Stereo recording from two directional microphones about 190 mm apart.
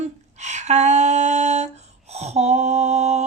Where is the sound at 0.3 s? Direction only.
35° right (ahead or behind).